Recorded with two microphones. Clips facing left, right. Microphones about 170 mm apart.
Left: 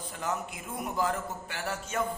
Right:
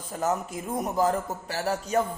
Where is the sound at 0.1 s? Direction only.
40° right (ahead or behind).